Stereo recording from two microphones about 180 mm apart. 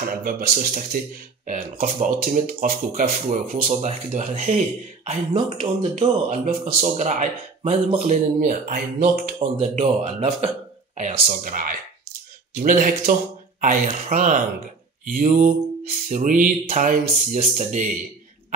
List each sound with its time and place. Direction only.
0.2 s speech: 55° right (ahead or behind)
5.3 s speech: 25° right (ahead or behind)
5.9 s speech: 45° right (ahead or behind)
9.4 s speech: 35° right (ahead or behind)
11.2 s speech: 50° right (ahead or behind)